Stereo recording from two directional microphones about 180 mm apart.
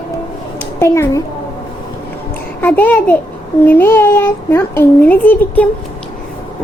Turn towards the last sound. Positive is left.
turn(degrees=10)  # may be behind; listen again after turning